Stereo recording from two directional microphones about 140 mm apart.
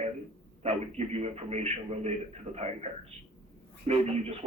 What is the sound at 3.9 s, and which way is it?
Speech, 50° right (ahead or behind).